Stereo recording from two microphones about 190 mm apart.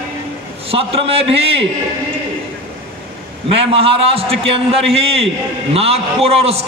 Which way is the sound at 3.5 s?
30° right (ahead or behind).